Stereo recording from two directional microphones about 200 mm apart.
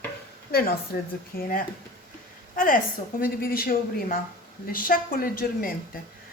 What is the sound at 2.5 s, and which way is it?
A woman's voice, 40° left (ahead or behind).